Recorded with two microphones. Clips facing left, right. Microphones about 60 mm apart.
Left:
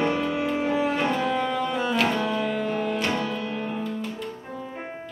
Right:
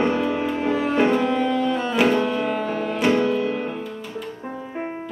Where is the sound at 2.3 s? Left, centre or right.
Centre.